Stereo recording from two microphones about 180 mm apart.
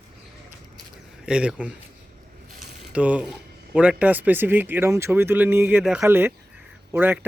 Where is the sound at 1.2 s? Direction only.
5° right (ahead or behind).